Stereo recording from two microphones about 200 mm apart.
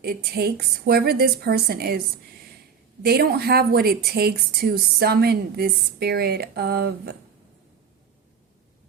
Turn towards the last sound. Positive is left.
turn(degrees=-55)  # may be behind; listen again after turning